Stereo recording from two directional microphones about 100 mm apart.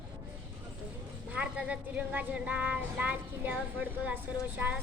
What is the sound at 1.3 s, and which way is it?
Speech, 10° right (ahead or behind).